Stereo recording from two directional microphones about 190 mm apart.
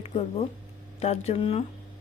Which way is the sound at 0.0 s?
35° left (ahead or behind).